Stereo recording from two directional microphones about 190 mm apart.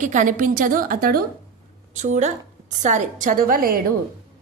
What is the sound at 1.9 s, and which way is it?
A woman's voice, 40° right (ahead or behind).